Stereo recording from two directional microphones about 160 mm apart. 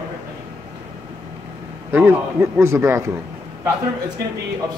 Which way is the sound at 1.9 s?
15° right (ahead or behind).